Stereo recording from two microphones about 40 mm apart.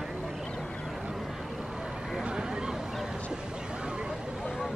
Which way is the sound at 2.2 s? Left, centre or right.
Centre.